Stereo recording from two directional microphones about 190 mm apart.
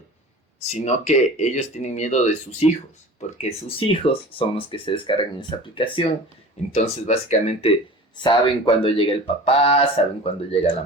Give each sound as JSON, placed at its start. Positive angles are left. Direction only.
{"t": 0.7, "sound": "speech", "side_deg": 35}
{"t": 3.8, "sound": "speech", "side_deg": 30}